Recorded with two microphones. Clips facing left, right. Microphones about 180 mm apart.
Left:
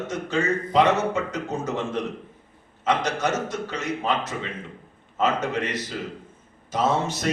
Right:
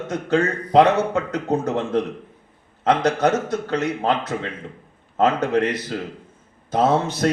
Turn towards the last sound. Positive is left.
turn(degrees=-55)  # may be behind; listen again after turning